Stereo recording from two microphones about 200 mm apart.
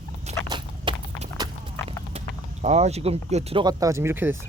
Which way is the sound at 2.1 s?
35° right (ahead or behind).